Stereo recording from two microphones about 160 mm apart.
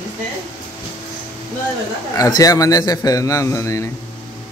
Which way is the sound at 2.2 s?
20° left (ahead or behind).